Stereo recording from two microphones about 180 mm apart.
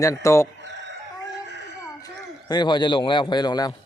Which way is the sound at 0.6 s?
80° right.